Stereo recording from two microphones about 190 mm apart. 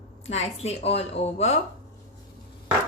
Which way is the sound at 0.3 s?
35° left (ahead or behind).